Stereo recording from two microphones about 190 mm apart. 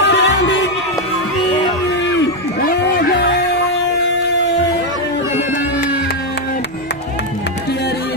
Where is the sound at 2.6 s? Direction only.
55° left (ahead or behind).